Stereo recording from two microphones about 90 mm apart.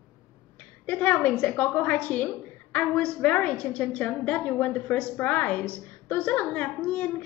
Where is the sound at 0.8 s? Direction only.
15° left (ahead or behind).